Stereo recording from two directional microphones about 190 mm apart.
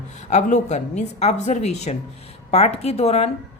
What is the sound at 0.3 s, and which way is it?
A woman's voice, 40° left (ahead or behind).